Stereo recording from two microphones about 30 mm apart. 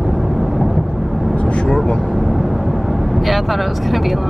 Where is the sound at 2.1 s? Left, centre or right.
Centre.